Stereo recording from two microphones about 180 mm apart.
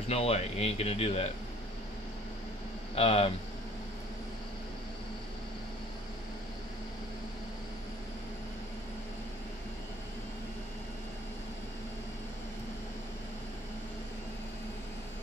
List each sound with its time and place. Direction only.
0.1 s speech: 35° left (ahead or behind)
2.9 s speech: 30° left (ahead or behind)